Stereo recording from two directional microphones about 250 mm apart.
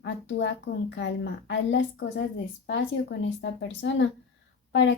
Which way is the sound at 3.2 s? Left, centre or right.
Left.